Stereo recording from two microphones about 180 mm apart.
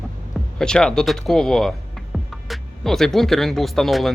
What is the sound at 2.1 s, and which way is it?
Music, centre (ahead or behind).